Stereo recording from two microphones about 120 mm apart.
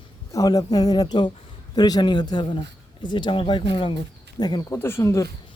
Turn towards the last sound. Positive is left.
turn(degrees=25)  # may be behind; listen again after turning